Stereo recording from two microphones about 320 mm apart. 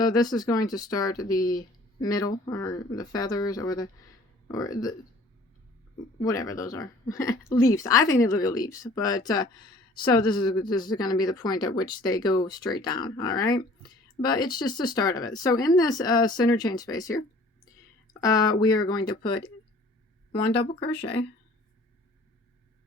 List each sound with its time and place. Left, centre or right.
0.0 s speech: centre
6.2 s a woman's voice: centre
20.6 s speech: left